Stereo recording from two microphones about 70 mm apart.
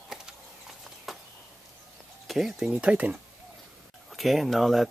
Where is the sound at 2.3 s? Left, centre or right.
Centre.